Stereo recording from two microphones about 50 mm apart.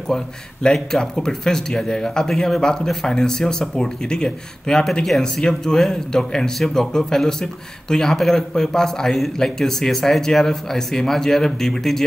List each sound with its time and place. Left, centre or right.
0.1 s speech: centre